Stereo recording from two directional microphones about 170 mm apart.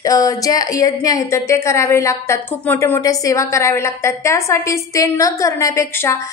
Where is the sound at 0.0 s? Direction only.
20° left (ahead or behind).